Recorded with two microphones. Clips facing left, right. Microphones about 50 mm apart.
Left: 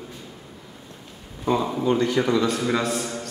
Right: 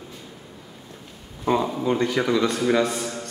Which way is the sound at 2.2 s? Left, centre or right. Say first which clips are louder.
Even; right.